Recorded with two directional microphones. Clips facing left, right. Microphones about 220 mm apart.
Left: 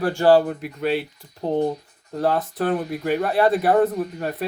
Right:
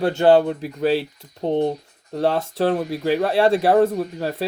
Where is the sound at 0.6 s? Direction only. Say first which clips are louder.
Right 3 dB; 35° right (ahead or behind).